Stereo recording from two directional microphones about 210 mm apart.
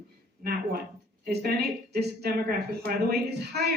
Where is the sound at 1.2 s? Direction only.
45° right (ahead or behind).